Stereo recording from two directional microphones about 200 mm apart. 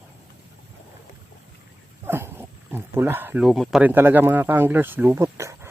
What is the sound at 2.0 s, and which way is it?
Speech, 10° right (ahead or behind).